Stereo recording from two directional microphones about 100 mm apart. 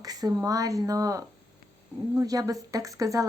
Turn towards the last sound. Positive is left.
turn(degrees=-35)  # may be behind; listen again after turning